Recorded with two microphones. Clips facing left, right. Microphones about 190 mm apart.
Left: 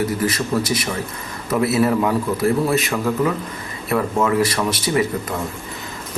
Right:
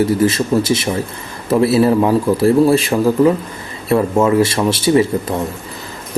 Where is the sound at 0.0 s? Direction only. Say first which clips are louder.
Right 7 dB; 25° right (ahead or behind).